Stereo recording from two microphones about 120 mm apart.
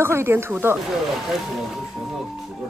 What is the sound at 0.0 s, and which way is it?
Speech, 20° right (ahead or behind).